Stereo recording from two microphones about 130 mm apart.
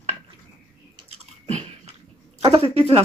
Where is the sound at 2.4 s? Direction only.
50° right (ahead or behind).